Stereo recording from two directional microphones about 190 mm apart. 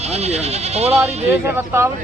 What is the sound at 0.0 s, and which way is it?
Speech, 35° right (ahead or behind).